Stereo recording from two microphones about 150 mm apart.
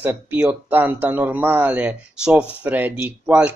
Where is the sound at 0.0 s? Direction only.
10° right (ahead or behind).